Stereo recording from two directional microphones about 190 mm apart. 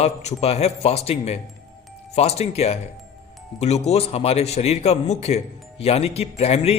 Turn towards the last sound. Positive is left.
turn(degrees=30)  # may be behind; listen again after turning